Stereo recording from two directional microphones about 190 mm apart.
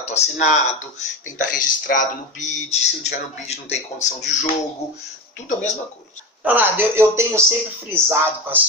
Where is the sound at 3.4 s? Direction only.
35° left (ahead or behind).